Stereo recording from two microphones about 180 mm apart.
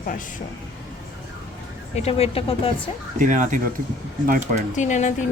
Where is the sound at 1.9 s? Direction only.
35° left (ahead or behind).